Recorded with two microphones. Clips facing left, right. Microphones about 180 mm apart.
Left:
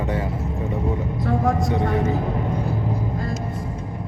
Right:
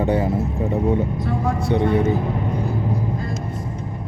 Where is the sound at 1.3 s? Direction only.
45° left (ahead or behind).